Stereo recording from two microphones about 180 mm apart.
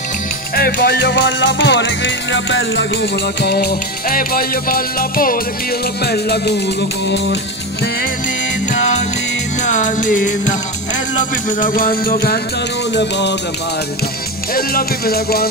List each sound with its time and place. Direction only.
0.6 s music: 55° left (ahead or behind)
6.0 s music: 65° left (ahead or behind)
9.7 s music: 45° left (ahead or behind)
11.6 s music: 50° left (ahead or behind)
14.5 s music: 55° left (ahead or behind)